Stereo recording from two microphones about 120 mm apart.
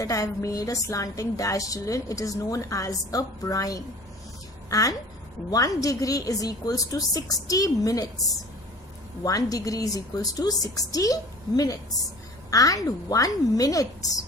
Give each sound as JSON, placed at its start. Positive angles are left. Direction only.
{"t": 0.0, "sound": "a woman's voice", "side_deg": 25}
{"t": 9.2, "sound": "a woman's voice", "side_deg": 30}